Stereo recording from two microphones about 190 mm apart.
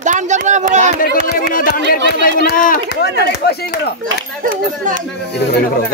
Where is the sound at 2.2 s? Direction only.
50° left (ahead or behind).